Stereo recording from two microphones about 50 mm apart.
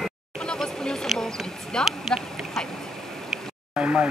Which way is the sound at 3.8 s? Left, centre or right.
Right.